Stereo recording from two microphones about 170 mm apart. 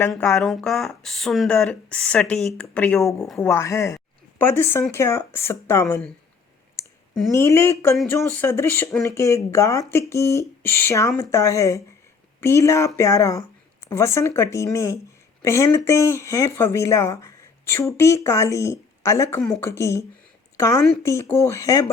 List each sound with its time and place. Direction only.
0.1 s speech: centre (ahead or behind)
7.3 s a woman's voice: 15° left (ahead or behind)